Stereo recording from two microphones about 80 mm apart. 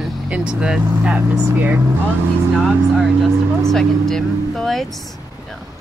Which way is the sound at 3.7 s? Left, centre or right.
Centre.